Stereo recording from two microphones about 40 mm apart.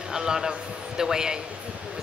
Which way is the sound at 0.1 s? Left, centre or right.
Centre.